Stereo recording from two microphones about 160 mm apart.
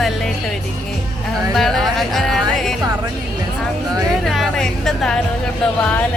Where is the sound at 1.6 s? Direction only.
Centre (ahead or behind).